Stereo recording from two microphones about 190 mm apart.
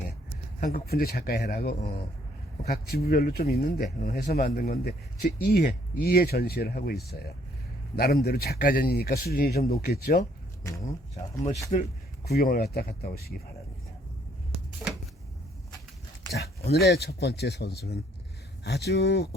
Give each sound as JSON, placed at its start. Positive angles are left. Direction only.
{"t": 0.6, "sound": "a man's voice", "side_deg": 45}
{"t": 10.6, "sound": "speech", "side_deg": 15}
{"t": 11.7, "sound": "speech", "side_deg": 35}
{"t": 12.3, "sound": "speech", "side_deg": 55}
{"t": 14.8, "sound": "a sound", "side_deg": -15}
{"t": 16.6, "sound": "a man's voice", "side_deg": 60}